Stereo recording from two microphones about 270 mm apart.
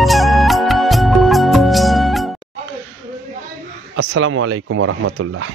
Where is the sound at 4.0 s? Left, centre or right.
Right.